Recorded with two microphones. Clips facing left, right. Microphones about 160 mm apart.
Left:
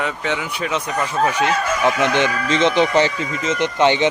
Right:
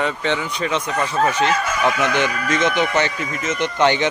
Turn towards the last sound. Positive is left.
turn(degrees=20)  # may be behind; listen again after turning